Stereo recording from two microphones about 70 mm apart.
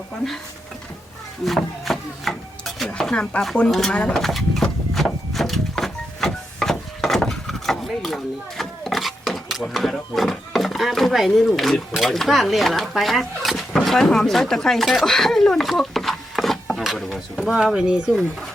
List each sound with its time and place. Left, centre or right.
1.5 s speech: centre
3.9 s speech: centre
4.2 s a sound: centre
17.5 s speech: centre